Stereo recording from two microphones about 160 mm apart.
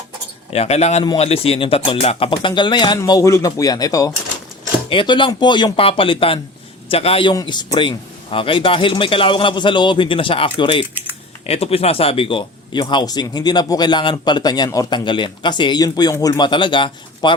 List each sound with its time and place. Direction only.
0.5 s speech: 40° left (ahead or behind)